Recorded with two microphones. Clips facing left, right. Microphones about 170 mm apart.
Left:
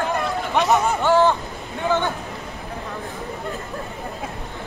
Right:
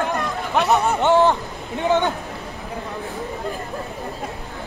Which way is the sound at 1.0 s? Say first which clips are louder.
Right 1 dB; 20° right (ahead or behind).